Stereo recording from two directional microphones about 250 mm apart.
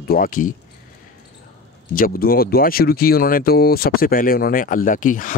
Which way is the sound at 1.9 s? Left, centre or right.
Left.